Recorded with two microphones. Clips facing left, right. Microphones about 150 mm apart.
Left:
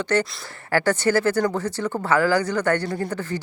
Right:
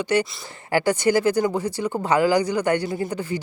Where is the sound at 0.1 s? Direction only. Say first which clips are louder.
Right 1 dB; 10° right (ahead or behind).